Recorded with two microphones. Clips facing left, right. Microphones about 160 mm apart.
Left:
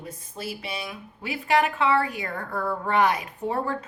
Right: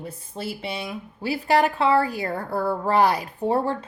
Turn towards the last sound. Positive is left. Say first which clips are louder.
# right 5 dB
turn(degrees=-35)  # may be behind; listen again after turning